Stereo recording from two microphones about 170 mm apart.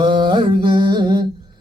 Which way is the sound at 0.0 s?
30° right (ahead or behind).